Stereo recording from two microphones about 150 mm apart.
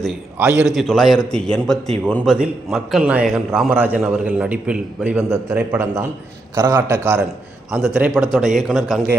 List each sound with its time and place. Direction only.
0.3 s a man's voice: 10° right (ahead or behind)
0.7 s a man's voice: centre (ahead or behind)